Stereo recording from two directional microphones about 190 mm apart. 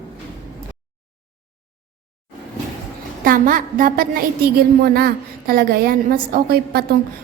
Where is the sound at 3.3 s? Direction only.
45° right (ahead or behind).